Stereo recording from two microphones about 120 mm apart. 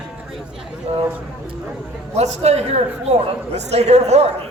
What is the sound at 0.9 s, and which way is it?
Speech, 60° right (ahead or behind).